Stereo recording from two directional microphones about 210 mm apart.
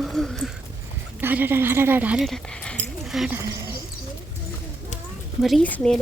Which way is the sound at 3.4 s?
15° right (ahead or behind).